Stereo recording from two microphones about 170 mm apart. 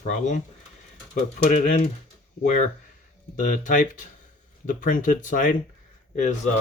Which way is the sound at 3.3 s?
50° left (ahead or behind).